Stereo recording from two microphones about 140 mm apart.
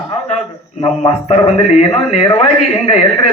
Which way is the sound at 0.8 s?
50° left (ahead or behind).